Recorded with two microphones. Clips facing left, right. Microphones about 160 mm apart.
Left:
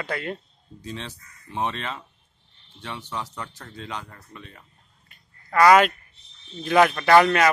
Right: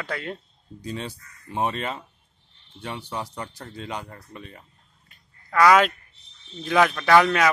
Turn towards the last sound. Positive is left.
turn(degrees=0)  # may be behind; listen again after turning